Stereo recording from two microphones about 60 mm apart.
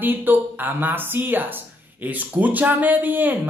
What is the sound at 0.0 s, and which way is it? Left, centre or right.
Speech, right.